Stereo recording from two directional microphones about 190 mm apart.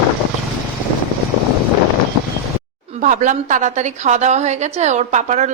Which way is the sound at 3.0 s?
40° right (ahead or behind).